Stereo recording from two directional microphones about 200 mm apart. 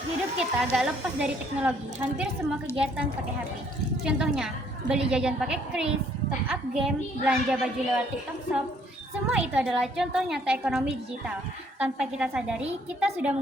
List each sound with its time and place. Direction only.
0.3 s a woman's voice: 5° right (ahead or behind)
9.3 s a woman's voice: 5° right (ahead or behind)